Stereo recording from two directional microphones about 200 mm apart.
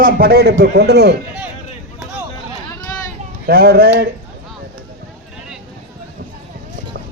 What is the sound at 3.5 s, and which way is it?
Speech, 50° right (ahead or behind).